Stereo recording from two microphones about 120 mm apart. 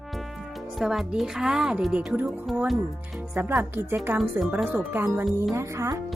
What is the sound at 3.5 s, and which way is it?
Speech, 20° right (ahead or behind).